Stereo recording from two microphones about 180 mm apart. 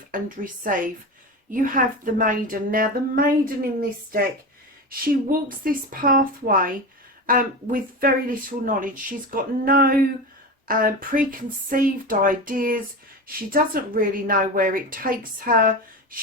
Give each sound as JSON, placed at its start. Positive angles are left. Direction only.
{"t": 0.1, "sound": "speech", "side_deg": -50}